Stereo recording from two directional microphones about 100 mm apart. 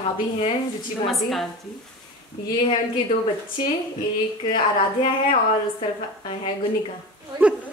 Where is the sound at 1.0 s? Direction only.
Centre (ahead or behind).